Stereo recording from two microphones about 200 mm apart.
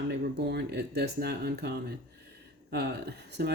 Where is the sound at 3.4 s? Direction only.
55° right (ahead or behind).